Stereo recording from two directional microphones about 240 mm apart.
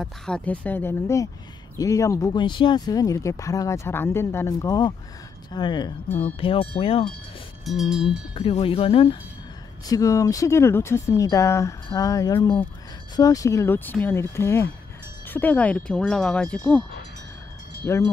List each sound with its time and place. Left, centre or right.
0.0 s speech: centre; by 7.1 s left
7.6 s speech: centre
8.4 s speech: left; by 16.8 s centre
17.8 s speech: centre